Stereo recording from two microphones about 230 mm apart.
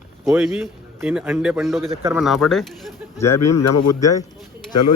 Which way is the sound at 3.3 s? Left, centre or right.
Left.